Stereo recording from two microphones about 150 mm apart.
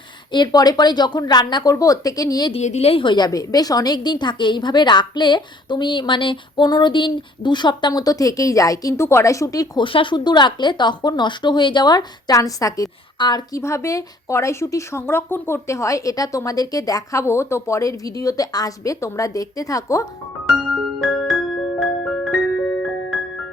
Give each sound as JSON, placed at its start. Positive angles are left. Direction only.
{"t": 0.3, "sound": "a woman's voice", "side_deg": 30}
{"t": 2.5, "sound": "a woman's voice", "side_deg": 45}
{"t": 21.0, "sound": "music", "side_deg": 0}